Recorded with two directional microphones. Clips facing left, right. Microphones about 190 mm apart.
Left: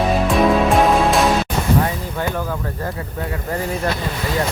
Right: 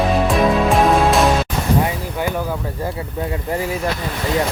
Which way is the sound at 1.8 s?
10° right (ahead or behind).